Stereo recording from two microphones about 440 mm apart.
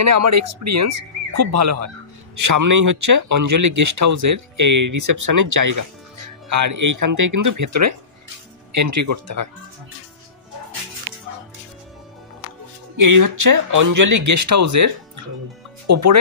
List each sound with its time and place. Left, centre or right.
0.0 s speech: right
12.9 s speech: right